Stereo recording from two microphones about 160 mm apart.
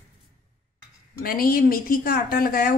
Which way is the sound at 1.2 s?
65° left (ahead or behind).